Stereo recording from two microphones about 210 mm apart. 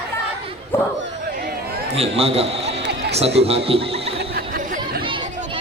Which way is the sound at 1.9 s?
30° right (ahead or behind).